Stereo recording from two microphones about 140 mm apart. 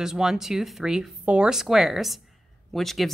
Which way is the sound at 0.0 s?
5° right (ahead or behind).